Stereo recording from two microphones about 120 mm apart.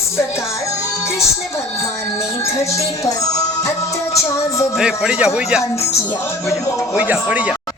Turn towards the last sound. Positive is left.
turn(degrees=-10)  # may be behind; listen again after turning